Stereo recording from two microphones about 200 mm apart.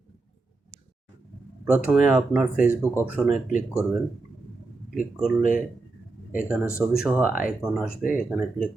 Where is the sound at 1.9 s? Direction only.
5° right (ahead or behind).